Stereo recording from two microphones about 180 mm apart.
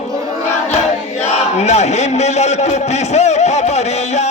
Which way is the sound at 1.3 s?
40° left (ahead or behind).